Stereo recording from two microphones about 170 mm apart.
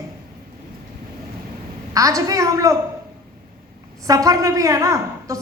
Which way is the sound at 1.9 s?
20° right (ahead or behind).